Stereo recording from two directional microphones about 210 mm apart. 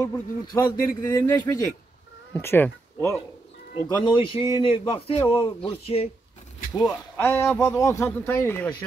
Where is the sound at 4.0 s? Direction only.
25° left (ahead or behind).